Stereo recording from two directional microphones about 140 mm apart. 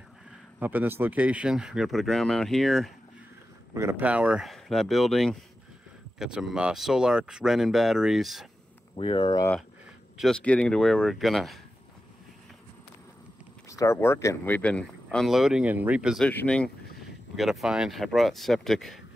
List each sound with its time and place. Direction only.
0.6 s speech: 15° right (ahead or behind)
3.7 s speech: 15° right (ahead or behind)
8.9 s speech: 40° left (ahead or behind)
10.1 s speech: 5° left (ahead or behind)
13.7 s speech: 20° left (ahead or behind); by 16.3 s 5° right (ahead or behind)
16.3 s speech: 10° left (ahead or behind)